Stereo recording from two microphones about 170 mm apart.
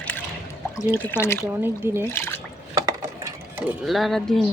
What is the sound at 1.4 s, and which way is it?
Speech, 15° right (ahead or behind).